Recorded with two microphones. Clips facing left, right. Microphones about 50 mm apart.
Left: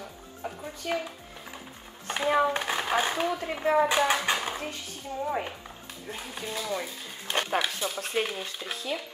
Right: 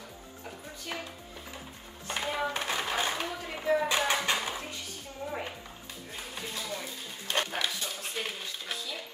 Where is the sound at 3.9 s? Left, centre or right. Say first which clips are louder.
Left 3 dB; left.